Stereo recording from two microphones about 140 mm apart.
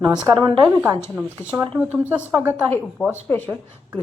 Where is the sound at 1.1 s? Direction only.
10° right (ahead or behind).